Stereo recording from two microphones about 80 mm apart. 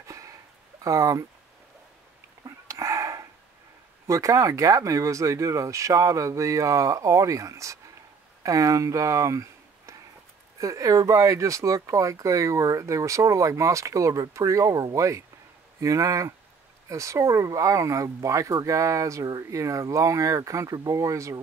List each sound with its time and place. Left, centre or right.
0.0 s a sound: right
0.8 s speech: right
2.4 s dog: right
4.1 s speech: right